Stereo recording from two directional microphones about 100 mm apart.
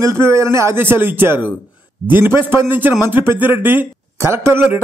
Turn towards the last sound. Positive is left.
turn(degrees=-20)  # may be behind; listen again after turning